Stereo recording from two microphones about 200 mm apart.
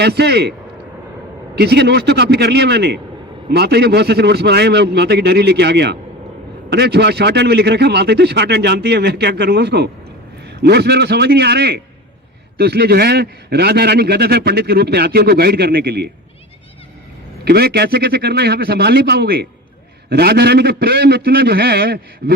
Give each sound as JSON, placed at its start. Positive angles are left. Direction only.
{"t": 0.0, "sound": "a man's voice", "side_deg": -55}
{"t": 1.5, "sound": "a man's voice", "side_deg": -55}
{"t": 17.4, "sound": "a man's voice", "side_deg": -55}